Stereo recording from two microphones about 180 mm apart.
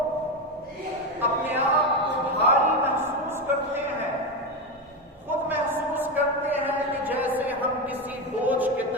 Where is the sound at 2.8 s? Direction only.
10° right (ahead or behind).